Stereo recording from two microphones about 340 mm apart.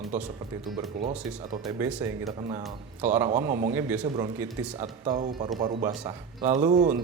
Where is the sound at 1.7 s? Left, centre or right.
Centre.